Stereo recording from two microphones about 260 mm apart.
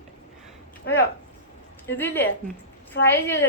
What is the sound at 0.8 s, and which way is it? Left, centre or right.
Speech, left.